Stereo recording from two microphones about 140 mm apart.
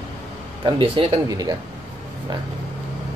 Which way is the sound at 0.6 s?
40° right (ahead or behind).